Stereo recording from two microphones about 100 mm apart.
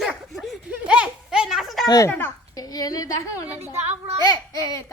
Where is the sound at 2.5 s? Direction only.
40° left (ahead or behind).